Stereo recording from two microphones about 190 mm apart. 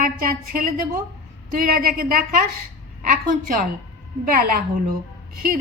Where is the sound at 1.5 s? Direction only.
50° right (ahead or behind).